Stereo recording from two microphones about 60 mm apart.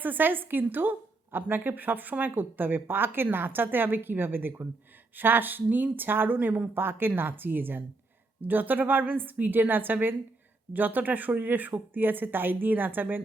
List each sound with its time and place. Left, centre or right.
0.0 s a woman's voice: right